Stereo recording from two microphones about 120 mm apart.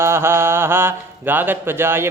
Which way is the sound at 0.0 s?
20° right (ahead or behind).